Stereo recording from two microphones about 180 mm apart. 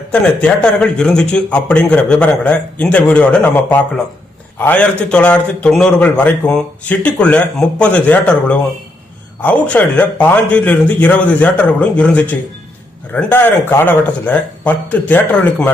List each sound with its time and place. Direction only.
0.1 s a man's voice: 5° left (ahead or behind)